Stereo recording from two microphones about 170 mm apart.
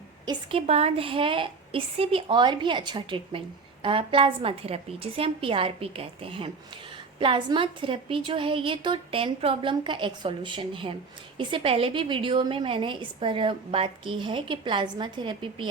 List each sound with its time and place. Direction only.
0.3 s a woman's voice: 35° right (ahead or behind)